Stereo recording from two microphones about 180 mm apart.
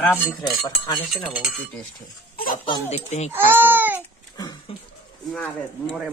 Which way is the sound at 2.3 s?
55° left (ahead or behind).